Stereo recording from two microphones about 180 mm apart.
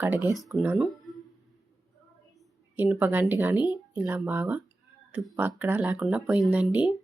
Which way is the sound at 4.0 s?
10° right (ahead or behind).